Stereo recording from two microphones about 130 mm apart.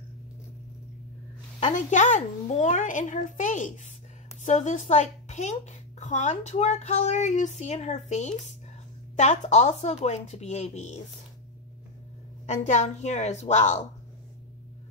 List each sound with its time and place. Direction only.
1.8 s a child's voice: 70° left (ahead or behind)
4.4 s a woman's voice: 65° left (ahead or behind)
12.4 s a woman's voice: 65° left (ahead or behind)